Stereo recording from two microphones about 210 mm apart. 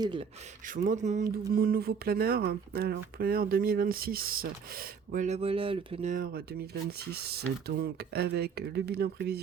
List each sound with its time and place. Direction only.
0.0 s speech: 20° right (ahead or behind)
0.7 s speech: 35° right (ahead or behind)